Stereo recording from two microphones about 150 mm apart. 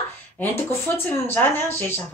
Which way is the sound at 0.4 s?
15° left (ahead or behind).